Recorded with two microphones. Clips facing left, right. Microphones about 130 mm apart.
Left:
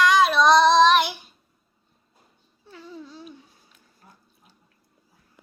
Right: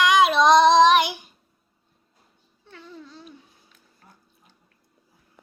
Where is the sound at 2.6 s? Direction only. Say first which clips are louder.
Left 2 dB; 5° left (ahead or behind).